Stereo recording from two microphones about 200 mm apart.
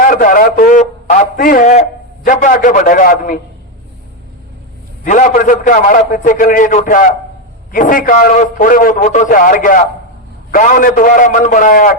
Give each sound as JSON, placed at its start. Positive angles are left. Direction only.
{"t": 0.0, "sound": "a man's voice", "side_deg": 45}
{"t": 5.0, "sound": "a man's voice", "side_deg": 40}